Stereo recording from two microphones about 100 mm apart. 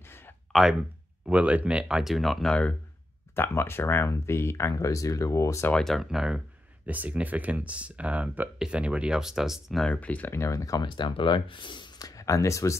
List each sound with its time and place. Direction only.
0.5 s a sound: centre (ahead or behind)
1.2 s speech: 10° right (ahead or behind)
3.3 s speech: 25° left (ahead or behind)
5.7 s speech: 5° left (ahead or behind)
9.8 s speech: 15° left (ahead or behind)
10.3 s speech: 30° left (ahead or behind)
10.9 s speech: 50° left (ahead or behind); by 12.7 s 30° left (ahead or behind)